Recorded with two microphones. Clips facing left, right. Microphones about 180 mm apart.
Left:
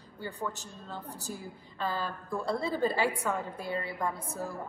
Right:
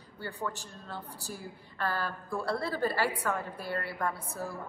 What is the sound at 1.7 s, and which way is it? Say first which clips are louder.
Speech: even; 15° left (ahead or behind).